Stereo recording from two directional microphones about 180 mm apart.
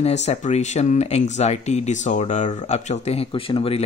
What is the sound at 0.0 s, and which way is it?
Speech, 35° left (ahead or behind).